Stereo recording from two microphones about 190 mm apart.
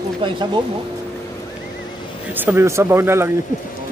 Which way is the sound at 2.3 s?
10° right (ahead or behind).